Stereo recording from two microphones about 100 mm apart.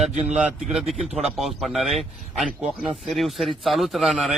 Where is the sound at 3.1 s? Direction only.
Centre (ahead or behind).